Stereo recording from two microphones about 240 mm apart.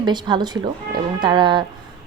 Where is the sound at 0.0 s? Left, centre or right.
Centre.